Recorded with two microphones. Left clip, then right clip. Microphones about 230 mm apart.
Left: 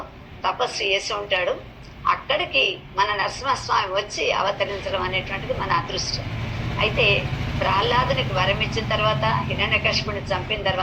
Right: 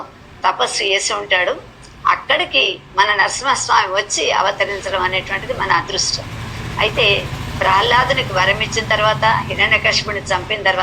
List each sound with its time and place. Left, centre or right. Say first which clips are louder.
0.4 s a woman's voice: right 6 dB; right